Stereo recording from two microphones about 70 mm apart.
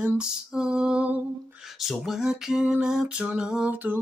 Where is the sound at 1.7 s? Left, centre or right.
Centre.